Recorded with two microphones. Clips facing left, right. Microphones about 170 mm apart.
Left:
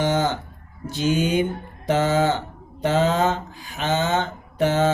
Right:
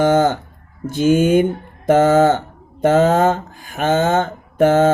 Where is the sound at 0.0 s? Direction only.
50° right (ahead or behind).